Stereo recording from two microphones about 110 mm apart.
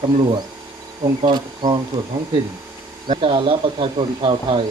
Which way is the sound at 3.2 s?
50° right (ahead or behind).